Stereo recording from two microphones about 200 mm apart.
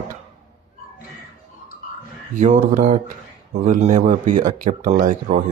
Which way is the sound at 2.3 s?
40° right (ahead or behind).